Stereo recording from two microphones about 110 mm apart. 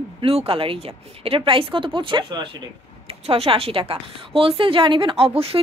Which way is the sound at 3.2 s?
60° right (ahead or behind).